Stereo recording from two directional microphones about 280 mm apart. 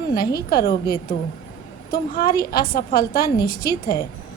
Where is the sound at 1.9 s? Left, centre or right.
Left.